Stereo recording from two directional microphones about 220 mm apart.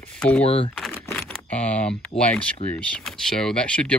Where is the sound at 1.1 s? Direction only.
5° left (ahead or behind).